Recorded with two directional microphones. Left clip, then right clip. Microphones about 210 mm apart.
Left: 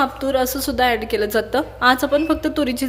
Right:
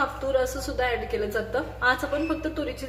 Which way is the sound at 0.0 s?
40° left (ahead or behind).